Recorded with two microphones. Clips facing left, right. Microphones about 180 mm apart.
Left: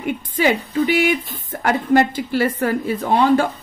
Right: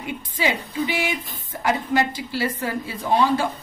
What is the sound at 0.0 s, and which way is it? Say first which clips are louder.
Speech: left 6 dB; 55° left (ahead or behind).